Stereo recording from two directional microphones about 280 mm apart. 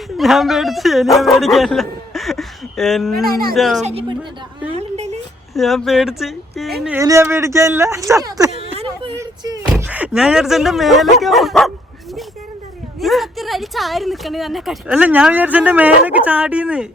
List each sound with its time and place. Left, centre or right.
0.2 s a woman's voice: centre
3.8 s speech: right
4.7 s a sound: right
5.5 s a woman's voice: centre; by 9.1 s right
9.1 s a sound: centre
11.2 s a woman's voice: centre
13.0 s a woman's voice: centre